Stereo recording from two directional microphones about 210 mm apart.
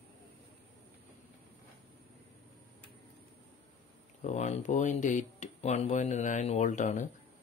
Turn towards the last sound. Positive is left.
turn(degrees=35)  # may be behind; listen again after turning